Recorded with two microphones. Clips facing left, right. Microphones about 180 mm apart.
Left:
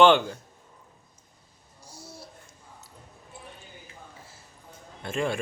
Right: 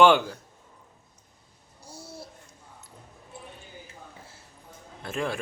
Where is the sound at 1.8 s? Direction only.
60° right (ahead or behind).